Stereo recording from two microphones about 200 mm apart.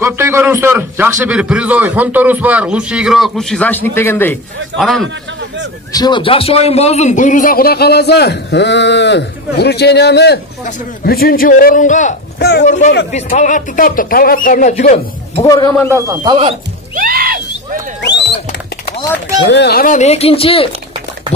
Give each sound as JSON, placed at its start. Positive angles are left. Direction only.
{"t": 0.0, "sound": "a man's voice", "side_deg": -15}
{"t": 5.9, "sound": "a man's voice", "side_deg": 20}
{"t": 15.4, "sound": "a man's voice", "side_deg": 15}
{"t": 15.9, "sound": "a man's voice", "side_deg": -15}
{"t": 16.9, "sound": "a sound", "side_deg": -50}
{"t": 19.5, "sound": "a man's voice", "side_deg": 55}